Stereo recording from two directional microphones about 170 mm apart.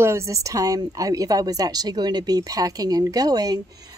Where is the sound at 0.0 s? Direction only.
15° right (ahead or behind).